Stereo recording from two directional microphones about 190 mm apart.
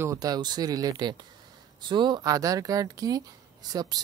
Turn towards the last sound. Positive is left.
turn(degrees=-20)  # may be behind; listen again after turning